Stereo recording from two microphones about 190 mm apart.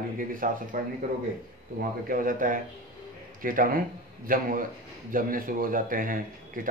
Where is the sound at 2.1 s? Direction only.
45° right (ahead or behind).